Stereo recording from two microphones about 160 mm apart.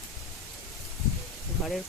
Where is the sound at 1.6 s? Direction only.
Centre (ahead or behind).